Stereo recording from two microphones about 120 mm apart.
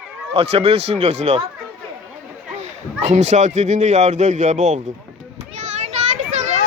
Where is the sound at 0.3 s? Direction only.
60° right (ahead or behind).